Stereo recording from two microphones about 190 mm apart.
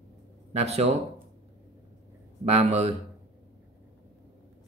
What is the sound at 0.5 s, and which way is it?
Speech, 35° right (ahead or behind).